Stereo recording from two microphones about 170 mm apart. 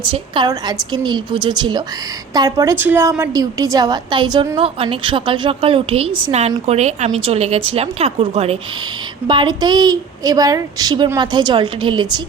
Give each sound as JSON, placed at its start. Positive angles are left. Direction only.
{"t": 0.1, "sound": "a woman's voice", "side_deg": -25}